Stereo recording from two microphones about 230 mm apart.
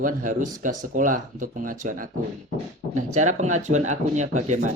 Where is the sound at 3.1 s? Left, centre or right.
Right.